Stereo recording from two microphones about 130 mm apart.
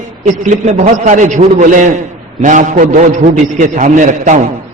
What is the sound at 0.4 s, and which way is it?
A man's voice, 65° right (ahead or behind).